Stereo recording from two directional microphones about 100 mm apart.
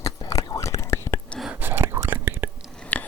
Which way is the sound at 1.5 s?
20° right (ahead or behind).